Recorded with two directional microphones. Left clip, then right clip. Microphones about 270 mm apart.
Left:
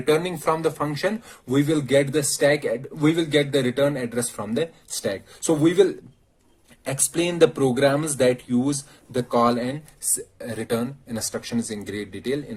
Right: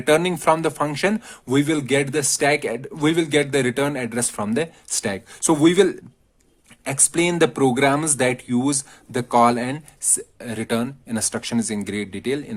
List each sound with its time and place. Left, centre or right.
0.0 s speech: right